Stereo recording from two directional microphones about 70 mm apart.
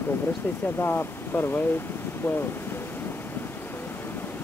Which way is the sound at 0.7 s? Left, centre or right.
Left.